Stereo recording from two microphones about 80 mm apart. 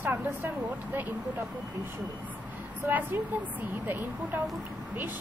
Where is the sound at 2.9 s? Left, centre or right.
Right.